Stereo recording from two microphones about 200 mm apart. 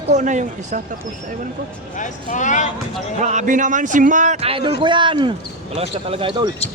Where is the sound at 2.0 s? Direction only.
40° left (ahead or behind).